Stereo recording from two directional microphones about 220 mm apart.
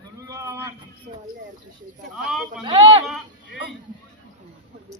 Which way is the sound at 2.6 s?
20° right (ahead or behind).